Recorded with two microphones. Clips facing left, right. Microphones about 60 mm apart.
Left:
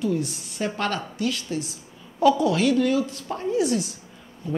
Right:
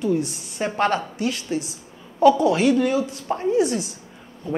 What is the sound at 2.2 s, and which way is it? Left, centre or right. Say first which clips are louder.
Speech: right 3 dB; centre.